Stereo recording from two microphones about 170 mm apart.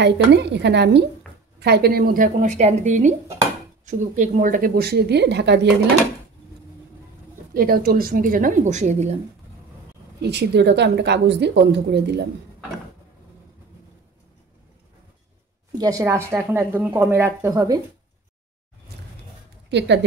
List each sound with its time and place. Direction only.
0.0 s a woman's voice: 90° right
1.6 s speech: 70° right (ahead or behind); by 5.7 s 90° right
7.5 s speech: 60° right (ahead or behind); by 9.1 s 45° right (ahead or behind)
10.2 s a woman's voice: 80° right
15.8 s a woman's voice: 20° right (ahead or behind)
19.7 s a woman's voice: 90° right